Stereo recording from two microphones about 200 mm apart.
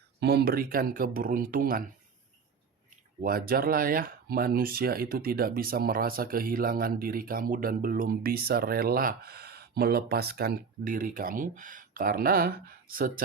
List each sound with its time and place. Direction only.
0.2 s speech: 55° right (ahead or behind)
3.2 s speech: 50° right (ahead or behind)